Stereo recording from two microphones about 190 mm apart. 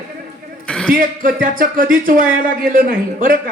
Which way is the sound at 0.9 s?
45° right (ahead or behind).